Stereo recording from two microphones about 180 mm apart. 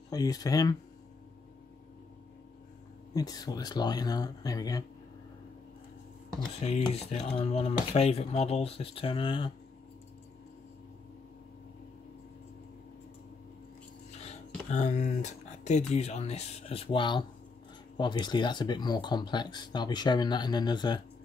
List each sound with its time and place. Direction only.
0.1 s speech: 20° left (ahead or behind)
3.1 s speech: 20° left (ahead or behind)
6.8 s speech: 30° left (ahead or behind)
14.2 s speech: 40° left (ahead or behind); by 21.0 s 25° left (ahead or behind)